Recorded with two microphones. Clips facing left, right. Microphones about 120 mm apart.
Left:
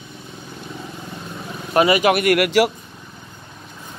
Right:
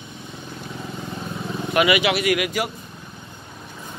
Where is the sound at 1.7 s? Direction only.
35° left (ahead or behind); by 2.7 s 70° left (ahead or behind).